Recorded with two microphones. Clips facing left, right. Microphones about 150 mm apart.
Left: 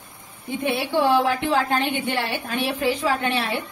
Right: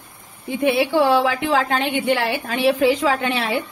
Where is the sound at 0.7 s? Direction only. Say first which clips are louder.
Right 2 dB; 90° right.